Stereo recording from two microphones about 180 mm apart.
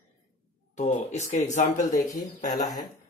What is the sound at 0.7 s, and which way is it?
A man's voice, 40° left (ahead or behind).